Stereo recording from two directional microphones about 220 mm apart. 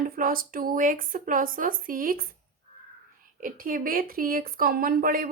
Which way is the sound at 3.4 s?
40° right (ahead or behind).